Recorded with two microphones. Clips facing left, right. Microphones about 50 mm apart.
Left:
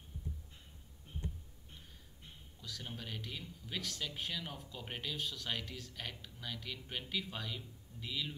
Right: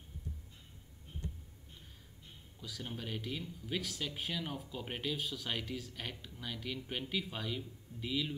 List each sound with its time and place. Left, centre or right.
2.6 s speech: centre